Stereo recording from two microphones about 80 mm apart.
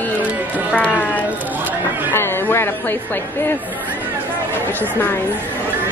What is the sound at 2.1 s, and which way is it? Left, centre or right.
Speech, left.